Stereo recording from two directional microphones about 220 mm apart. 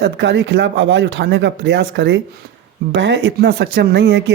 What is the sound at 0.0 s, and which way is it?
Speech, 55° right (ahead or behind).